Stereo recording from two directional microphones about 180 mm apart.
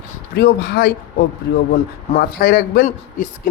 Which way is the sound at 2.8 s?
45° left (ahead or behind).